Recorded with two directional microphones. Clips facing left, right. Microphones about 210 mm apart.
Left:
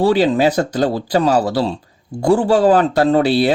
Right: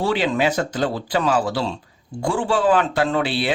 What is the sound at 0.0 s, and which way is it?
Speech, 40° left (ahead or behind).